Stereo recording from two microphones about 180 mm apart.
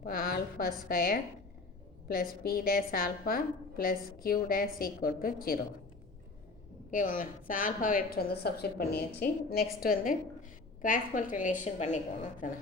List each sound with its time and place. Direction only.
0.0 s a woman's voice: 55° left (ahead or behind)
6.9 s a woman's voice: 50° left (ahead or behind)